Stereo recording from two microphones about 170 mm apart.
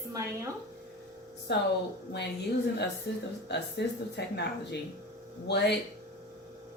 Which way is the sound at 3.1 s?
90° left.